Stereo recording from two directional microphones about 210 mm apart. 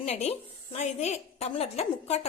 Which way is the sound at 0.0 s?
30° left (ahead or behind).